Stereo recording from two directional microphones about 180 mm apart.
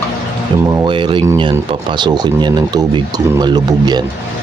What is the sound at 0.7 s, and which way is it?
Speech, 25° right (ahead or behind).